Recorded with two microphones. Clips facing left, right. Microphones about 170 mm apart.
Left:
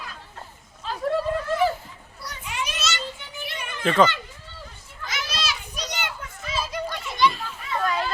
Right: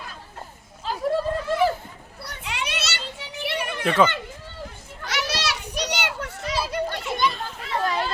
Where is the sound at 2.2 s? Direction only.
65° right (ahead or behind).